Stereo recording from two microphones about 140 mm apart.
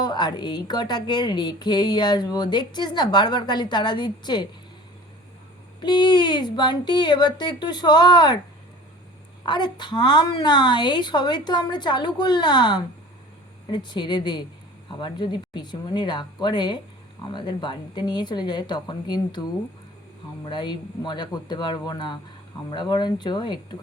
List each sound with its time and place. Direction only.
0.0 s a woman's voice: 30° left (ahead or behind)
5.8 s a woman's voice: 35° left (ahead or behind)
9.5 s a woman's voice: 30° left (ahead or behind)